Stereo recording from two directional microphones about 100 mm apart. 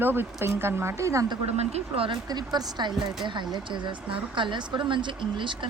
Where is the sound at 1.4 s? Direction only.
80° right.